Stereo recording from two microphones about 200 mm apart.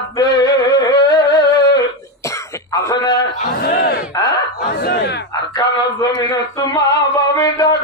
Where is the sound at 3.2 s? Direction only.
50° left (ahead or behind).